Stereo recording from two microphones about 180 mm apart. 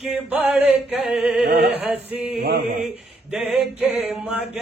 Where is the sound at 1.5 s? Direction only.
65° right (ahead or behind).